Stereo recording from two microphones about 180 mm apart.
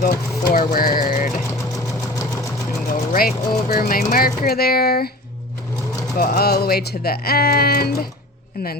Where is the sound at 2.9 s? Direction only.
55° left (ahead or behind).